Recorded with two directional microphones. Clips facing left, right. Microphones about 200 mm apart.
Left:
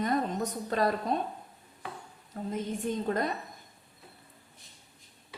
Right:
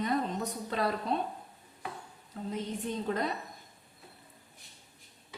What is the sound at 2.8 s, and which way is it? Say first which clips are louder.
Speech: left 3 dB; 45° left (ahead or behind).